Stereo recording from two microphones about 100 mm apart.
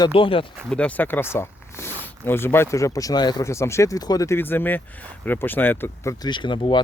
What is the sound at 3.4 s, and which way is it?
Speech, 30° left (ahead or behind).